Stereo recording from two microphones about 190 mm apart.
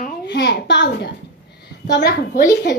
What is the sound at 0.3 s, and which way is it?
A woman's voice, 65° left (ahead or behind).